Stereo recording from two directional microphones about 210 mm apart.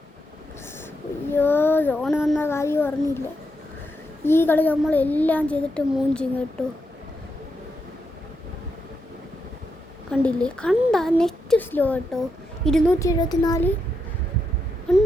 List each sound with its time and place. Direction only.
1.3 s child singing: 10° left (ahead or behind)
2.3 s a child's voice: 10° left (ahead or behind)
4.3 s child singing: 10° left (ahead or behind)
10.1 s speech: 5° left (ahead or behind)
13.0 s child singing: 15° left (ahead or behind)